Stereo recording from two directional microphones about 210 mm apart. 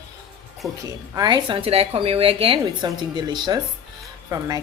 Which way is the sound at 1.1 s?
20° right (ahead or behind).